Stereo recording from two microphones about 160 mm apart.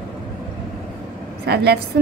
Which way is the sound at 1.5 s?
90° right.